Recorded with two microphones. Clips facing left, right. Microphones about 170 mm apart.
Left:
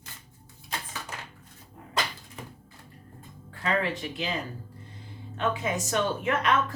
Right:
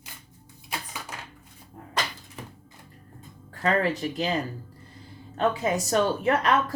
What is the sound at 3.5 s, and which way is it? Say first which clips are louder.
Speech: right 4 dB; 40° right (ahead or behind).